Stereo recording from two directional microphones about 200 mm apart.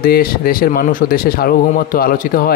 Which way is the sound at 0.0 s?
45° left (ahead or behind).